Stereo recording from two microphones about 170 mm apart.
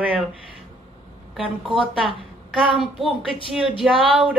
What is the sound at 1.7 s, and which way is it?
Speech, 30° right (ahead or behind).